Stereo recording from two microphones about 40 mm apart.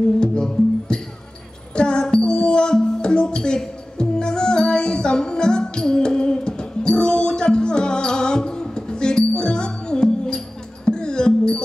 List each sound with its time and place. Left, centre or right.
0.2 s music: left